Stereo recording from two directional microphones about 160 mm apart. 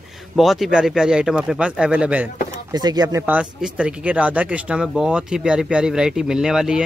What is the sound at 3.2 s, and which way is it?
Speech, 10° right (ahead or behind).